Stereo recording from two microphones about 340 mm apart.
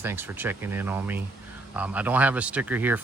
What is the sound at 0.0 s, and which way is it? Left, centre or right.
Speech, centre.